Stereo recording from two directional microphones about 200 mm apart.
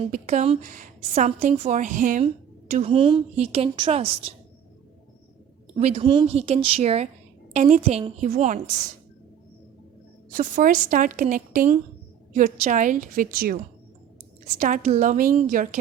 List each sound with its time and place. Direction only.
0.1 s a woman's voice: 35° right (ahead or behind)
5.7 s a woman's voice: 35° right (ahead or behind)
10.3 s a woman's voice: 40° right (ahead or behind)
14.6 s a woman's voice: 35° right (ahead or behind)